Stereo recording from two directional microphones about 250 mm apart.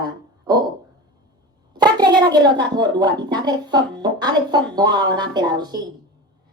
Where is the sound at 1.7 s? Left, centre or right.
Centre.